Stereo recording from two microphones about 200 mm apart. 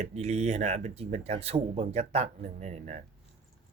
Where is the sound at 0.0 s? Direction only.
35° right (ahead or behind).